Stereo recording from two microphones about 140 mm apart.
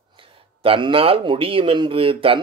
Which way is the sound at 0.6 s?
40° right (ahead or behind).